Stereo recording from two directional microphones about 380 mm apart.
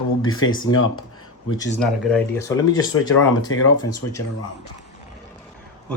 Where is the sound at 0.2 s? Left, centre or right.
Left.